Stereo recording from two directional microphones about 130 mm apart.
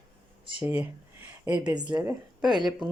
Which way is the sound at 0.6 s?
15° right (ahead or behind).